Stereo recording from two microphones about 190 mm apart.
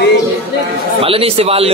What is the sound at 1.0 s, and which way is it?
Speech, 30° right (ahead or behind).